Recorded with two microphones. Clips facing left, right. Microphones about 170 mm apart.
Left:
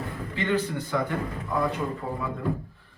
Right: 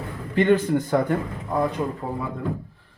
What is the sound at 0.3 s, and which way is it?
Speech, 50° right (ahead or behind).